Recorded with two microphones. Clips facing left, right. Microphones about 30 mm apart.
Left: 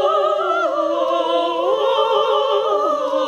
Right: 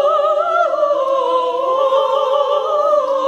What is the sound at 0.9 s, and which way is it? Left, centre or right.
Opera, centre.